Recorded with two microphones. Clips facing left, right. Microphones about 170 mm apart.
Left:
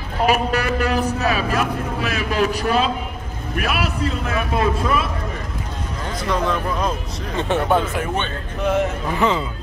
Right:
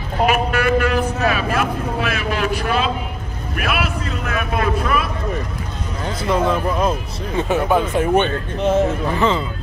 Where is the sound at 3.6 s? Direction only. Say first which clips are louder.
Even; 40° left (ahead or behind).